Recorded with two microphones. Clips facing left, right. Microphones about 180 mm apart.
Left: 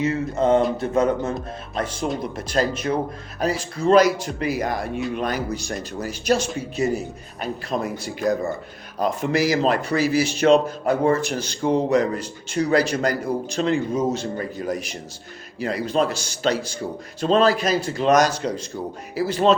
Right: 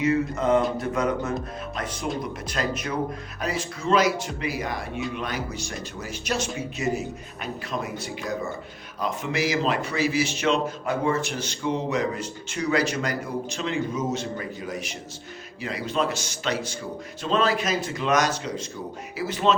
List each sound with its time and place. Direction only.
0.0 s a sound: 30° left (ahead or behind)
2.5 s a man's voice: 30° left (ahead or behind)
15.6 s a man's voice: 40° left (ahead or behind)